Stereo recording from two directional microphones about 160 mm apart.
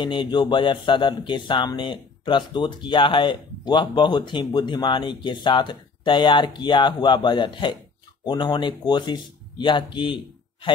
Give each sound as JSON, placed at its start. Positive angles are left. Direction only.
{"t": 0.0, "sound": "speech", "side_deg": 30}